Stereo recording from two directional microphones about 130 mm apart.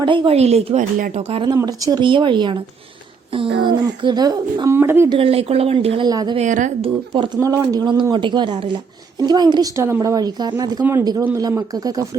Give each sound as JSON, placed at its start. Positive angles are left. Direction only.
{"t": 0.0, "sound": "a woman's voice", "side_deg": -40}
{"t": 0.3, "sound": "speech", "side_deg": -55}
{"t": 0.9, "sound": "speech", "side_deg": -90}
{"t": 1.3, "sound": "a woman's voice", "side_deg": -40}
{"t": 1.5, "sound": "a woman's voice", "side_deg": -30}
{"t": 5.0, "sound": "speech", "side_deg": -45}
{"t": 6.1, "sound": "speech", "side_deg": -30}
{"t": 6.3, "sound": "a woman's voice", "side_deg": -70}
{"t": 6.8, "sound": "speech", "side_deg": -45}
{"t": 7.3, "sound": "a woman's voice", "side_deg": -25}